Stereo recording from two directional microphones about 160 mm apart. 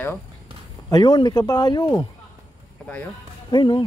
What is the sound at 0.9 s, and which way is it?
Speech, 30° left (ahead or behind).